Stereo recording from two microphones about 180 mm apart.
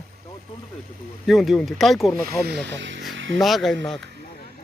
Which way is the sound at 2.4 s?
70° right (ahead or behind).